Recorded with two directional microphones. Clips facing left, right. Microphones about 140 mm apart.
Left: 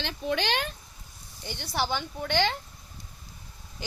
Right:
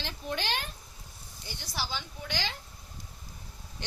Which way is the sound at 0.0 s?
90° left.